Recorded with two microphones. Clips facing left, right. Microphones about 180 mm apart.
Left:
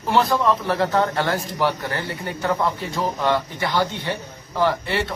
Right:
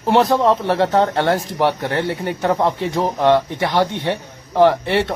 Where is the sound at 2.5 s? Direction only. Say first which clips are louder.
Right 4 dB; 20° right (ahead or behind).